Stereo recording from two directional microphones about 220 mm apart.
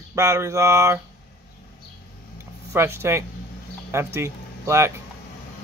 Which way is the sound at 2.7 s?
10° right (ahead or behind).